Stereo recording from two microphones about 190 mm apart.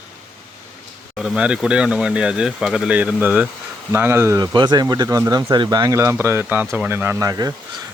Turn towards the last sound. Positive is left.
turn(degrees=-20)  # may be behind; listen again after turning